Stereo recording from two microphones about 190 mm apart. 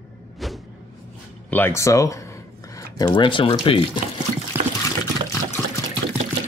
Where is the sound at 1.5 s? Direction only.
15° left (ahead or behind).